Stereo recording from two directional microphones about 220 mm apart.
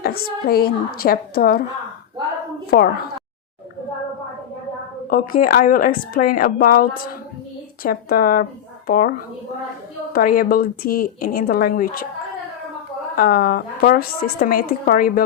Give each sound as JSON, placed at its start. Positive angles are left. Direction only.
{"t": 0.0, "sound": "a woman's voice", "side_deg": 45}
{"t": 2.6, "sound": "a woman's voice", "side_deg": 45}
{"t": 5.0, "sound": "a woman's voice", "side_deg": 40}
{"t": 13.1, "sound": "a woman's voice", "side_deg": 40}